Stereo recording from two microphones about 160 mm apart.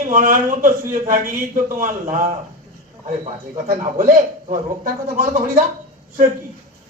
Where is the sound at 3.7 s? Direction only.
60° right (ahead or behind).